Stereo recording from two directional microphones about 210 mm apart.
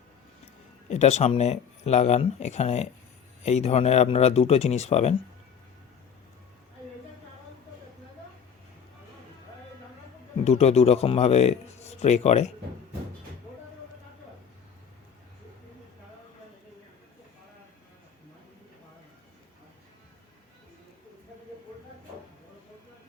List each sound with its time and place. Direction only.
0.9 s speech: 35° left (ahead or behind)
10.4 s speech: 30° left (ahead or behind)